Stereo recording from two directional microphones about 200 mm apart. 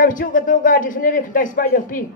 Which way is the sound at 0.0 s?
40° left (ahead or behind).